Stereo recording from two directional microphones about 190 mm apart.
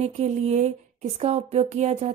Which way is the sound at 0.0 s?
35° right (ahead or behind).